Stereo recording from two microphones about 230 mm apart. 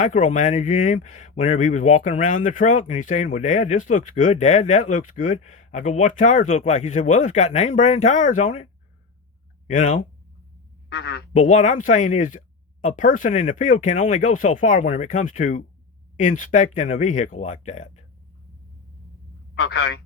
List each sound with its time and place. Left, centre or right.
0.0 s speech: left
9.6 s speech: left
10.9 s a man's voice: left
11.3 s speech: left
19.5 s a man's voice: left